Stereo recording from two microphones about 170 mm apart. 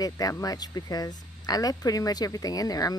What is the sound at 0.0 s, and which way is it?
Speech, 20° left (ahead or behind).